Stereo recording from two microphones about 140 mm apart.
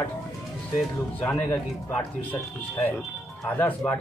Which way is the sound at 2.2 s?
15° left (ahead or behind).